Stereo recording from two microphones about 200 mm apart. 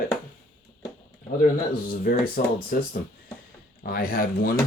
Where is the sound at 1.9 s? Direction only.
45° left (ahead or behind).